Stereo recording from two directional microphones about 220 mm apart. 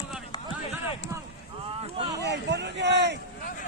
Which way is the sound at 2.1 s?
50° right (ahead or behind).